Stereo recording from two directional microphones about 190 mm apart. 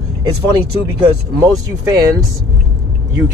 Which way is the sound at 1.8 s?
15° right (ahead or behind).